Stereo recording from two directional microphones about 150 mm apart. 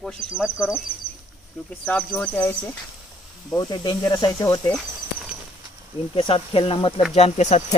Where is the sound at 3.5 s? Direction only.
25° left (ahead or behind).